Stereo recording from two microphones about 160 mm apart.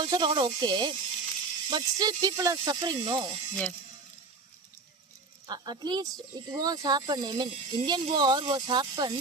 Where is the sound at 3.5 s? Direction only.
5° left (ahead or behind).